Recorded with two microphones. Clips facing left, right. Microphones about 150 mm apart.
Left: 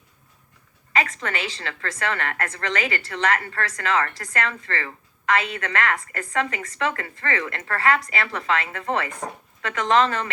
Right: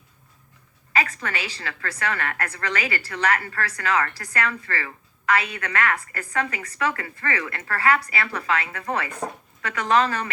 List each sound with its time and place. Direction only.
1.2 s a woman's voice: 25° left (ahead or behind)